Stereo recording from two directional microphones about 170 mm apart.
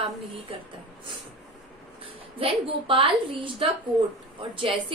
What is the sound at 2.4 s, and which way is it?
A woman's voice, 30° right (ahead or behind).